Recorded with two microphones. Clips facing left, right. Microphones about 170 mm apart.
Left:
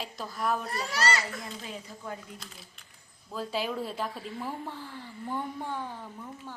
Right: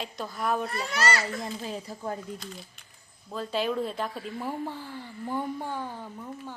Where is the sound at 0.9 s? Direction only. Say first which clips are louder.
Right 2 dB; 30° left (ahead or behind).